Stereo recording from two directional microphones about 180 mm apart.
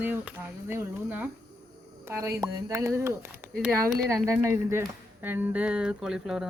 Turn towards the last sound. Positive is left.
turn(degrees=-5)  # may be behind; listen again after turning